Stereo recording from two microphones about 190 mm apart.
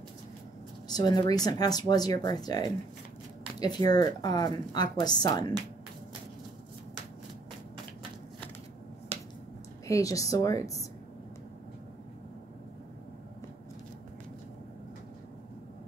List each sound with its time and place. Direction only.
0.8 s speech: 20° left (ahead or behind)
9.8 s a woman's voice: 15° left (ahead or behind)